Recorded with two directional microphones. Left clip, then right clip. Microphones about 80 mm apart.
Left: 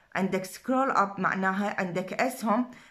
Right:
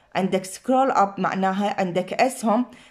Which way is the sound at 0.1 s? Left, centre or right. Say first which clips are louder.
Right 6 dB; right.